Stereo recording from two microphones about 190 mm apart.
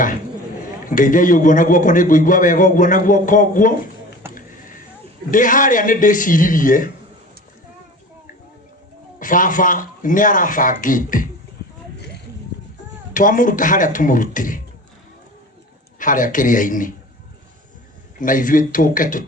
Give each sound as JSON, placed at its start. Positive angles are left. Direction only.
{"t": 0.9, "sound": "a man's voice", "side_deg": 45}
{"t": 4.2, "sound": "a sound", "side_deg": -10}
{"t": 5.3, "sound": "a man's voice", "side_deg": 45}
{"t": 9.1, "sound": "a man's voice", "side_deg": 45}
{"t": 13.1, "sound": "a man's voice", "side_deg": 45}
{"t": 16.0, "sound": "a man's voice", "side_deg": 45}
{"t": 18.2, "sound": "a man's voice", "side_deg": 45}